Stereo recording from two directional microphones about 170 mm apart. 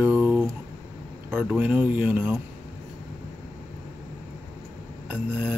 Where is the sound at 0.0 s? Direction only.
10° right (ahead or behind).